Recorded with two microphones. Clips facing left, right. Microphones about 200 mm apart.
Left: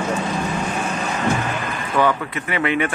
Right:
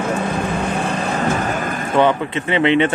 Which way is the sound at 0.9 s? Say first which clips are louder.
Right 2 dB; 40° right (ahead or behind).